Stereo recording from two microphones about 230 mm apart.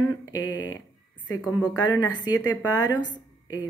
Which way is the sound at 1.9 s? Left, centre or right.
Centre.